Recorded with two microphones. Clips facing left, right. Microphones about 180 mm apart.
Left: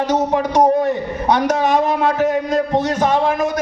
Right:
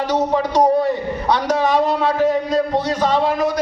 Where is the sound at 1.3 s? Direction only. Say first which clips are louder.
Left 2 dB; 45° left (ahead or behind).